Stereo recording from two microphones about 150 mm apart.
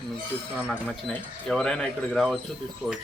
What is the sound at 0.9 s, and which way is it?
Speech, 5° left (ahead or behind).